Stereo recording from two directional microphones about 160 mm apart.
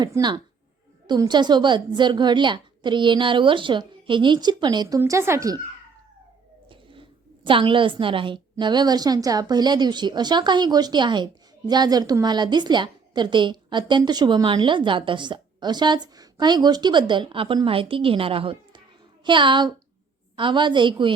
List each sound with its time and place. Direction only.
0.0 s a woman's voice: 25° right (ahead or behind)
6.7 s a woman's voice: 30° right (ahead or behind)